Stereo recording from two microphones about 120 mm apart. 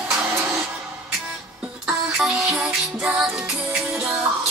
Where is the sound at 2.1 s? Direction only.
5° right (ahead or behind).